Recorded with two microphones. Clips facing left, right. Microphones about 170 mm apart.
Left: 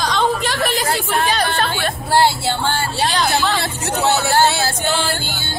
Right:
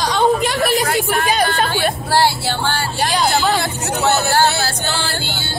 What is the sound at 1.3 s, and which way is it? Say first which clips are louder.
Speech: right 2 dB; 10° right (ahead or behind).